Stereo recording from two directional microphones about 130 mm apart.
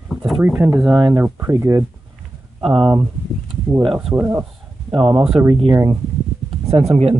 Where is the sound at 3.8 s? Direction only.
Centre (ahead or behind).